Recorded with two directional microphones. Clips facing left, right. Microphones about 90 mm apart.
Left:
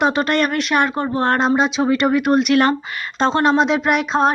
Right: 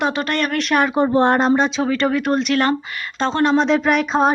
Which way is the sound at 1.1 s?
15° right (ahead or behind).